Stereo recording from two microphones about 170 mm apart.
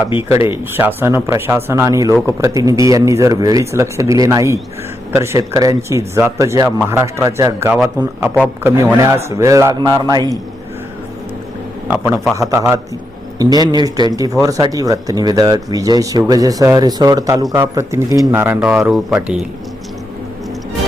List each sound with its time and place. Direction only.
0.3 s speech: 15° right (ahead or behind)
11.9 s speech: 15° right (ahead or behind)